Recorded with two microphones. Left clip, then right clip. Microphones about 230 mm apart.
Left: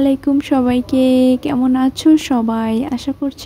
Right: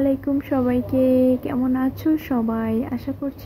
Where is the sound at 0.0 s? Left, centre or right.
Left.